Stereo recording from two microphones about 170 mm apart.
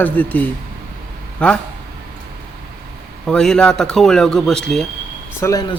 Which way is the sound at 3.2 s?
5° left (ahead or behind).